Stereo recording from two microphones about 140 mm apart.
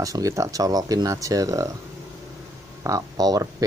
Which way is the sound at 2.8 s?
25° right (ahead or behind).